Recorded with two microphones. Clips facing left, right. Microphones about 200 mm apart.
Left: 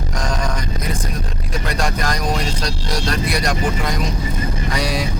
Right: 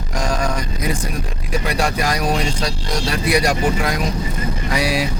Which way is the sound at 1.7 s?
10° right (ahead or behind).